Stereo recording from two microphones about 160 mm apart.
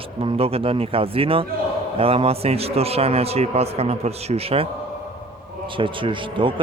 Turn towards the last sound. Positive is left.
turn(degrees=-30)  # may be behind; listen again after turning